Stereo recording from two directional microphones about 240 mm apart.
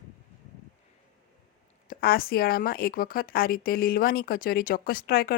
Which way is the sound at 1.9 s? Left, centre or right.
Left.